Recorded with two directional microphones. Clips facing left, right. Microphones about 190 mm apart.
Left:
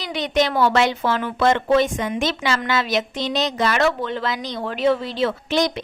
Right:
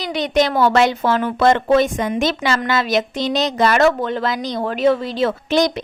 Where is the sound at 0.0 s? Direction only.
40° right (ahead or behind).